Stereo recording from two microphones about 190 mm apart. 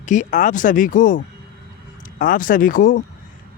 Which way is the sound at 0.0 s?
40° left (ahead or behind).